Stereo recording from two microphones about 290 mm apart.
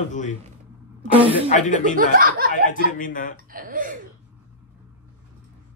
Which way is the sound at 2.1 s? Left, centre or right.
Right.